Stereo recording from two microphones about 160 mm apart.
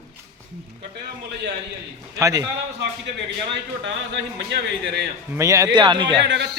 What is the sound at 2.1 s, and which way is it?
Speech, 20° right (ahead or behind).